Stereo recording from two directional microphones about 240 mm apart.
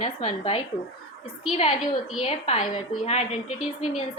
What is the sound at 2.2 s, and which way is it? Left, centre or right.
A woman's voice, left.